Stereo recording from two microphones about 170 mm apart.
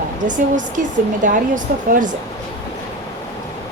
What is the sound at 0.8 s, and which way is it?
Speech, 50° right (ahead or behind).